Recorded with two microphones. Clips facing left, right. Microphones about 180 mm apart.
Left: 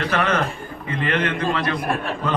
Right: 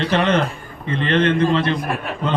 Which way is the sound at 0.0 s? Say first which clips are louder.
Right 4 dB; 30° right (ahead or behind).